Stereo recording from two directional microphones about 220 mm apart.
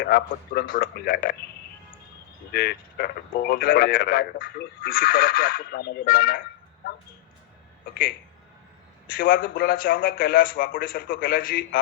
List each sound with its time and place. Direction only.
0.1 s speech: 40° left (ahead or behind)
2.5 s speech: 45° left (ahead or behind)
9.1 s a man's voice: 40° left (ahead or behind)